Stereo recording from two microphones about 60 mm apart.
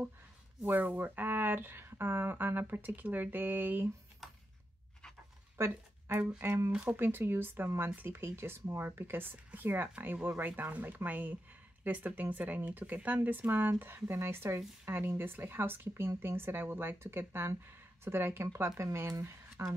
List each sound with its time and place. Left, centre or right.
0.7 s speech: right
4.2 s a sound: centre
5.6 s a sound: right
6.4 s speech: right
6.7 s speech: right
7.0 s speech: right
18.8 s speech: right